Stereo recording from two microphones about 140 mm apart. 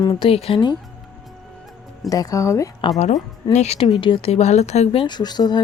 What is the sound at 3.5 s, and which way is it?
Speech, 50° left (ahead or behind).